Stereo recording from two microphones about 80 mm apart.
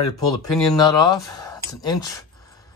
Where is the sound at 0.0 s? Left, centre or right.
Left.